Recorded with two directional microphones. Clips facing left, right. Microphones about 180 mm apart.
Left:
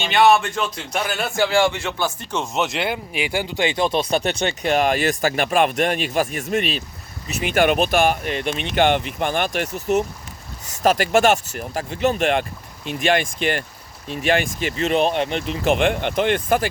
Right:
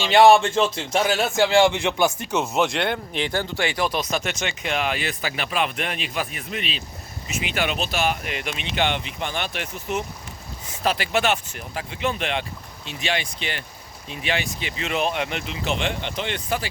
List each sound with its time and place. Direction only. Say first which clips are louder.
0.1 s speech: right 2 dB; 30° right (ahead or behind); by 8.2 s 50° left (ahead or behind)
8.2 s speech: left 6 dB; 35° left (ahead or behind)
8.5 s speech: left 7 dB; 50° left (ahead or behind)
15.6 s speech: left 8 dB; 55° left (ahead or behind)